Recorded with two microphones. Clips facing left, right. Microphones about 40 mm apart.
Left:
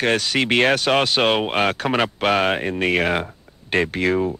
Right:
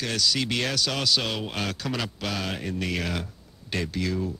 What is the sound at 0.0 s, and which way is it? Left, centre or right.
Speech, left.